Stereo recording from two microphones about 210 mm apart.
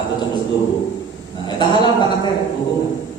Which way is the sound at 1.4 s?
20° left (ahead or behind).